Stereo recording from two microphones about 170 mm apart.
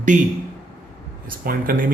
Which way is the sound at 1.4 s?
60° right (ahead or behind).